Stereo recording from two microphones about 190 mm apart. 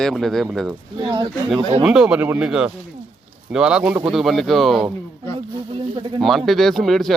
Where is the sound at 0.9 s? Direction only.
25° right (ahead or behind).